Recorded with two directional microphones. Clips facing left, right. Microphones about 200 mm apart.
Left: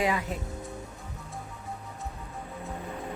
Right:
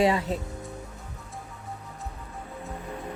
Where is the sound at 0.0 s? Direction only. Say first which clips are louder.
Right 5 dB; 30° right (ahead or behind).